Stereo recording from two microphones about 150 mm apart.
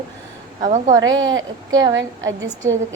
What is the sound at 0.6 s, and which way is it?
Speech, 55° right (ahead or behind).